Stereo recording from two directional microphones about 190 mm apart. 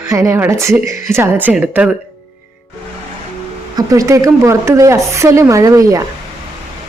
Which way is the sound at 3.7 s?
15° right (ahead or behind).